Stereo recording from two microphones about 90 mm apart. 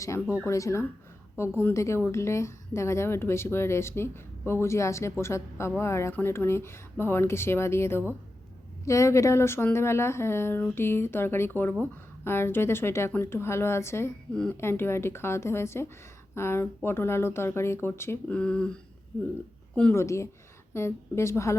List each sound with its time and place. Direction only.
0.0 s speech: 30° left (ahead or behind)
18.3 s speech: 15° left (ahead or behind)
19.9 s speech: 30° left (ahead or behind)